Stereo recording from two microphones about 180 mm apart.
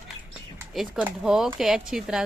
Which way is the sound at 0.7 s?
5° right (ahead or behind).